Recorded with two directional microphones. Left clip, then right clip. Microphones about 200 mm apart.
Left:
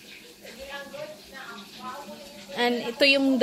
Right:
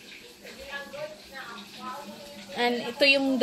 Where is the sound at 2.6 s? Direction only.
5° left (ahead or behind).